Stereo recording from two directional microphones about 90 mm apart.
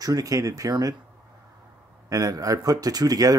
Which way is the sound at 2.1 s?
40° right (ahead or behind).